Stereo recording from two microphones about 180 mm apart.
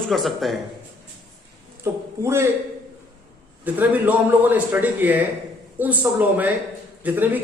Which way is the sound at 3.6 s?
10° right (ahead or behind).